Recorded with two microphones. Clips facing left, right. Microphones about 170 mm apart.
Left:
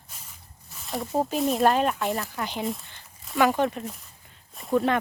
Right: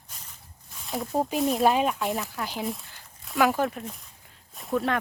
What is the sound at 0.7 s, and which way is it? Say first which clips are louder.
Speech: left 1 dB; centre (ahead or behind).